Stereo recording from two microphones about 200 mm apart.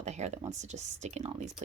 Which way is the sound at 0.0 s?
35° right (ahead or behind).